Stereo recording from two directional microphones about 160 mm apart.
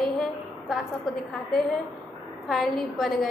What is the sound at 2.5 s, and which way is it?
Speech, centre (ahead or behind).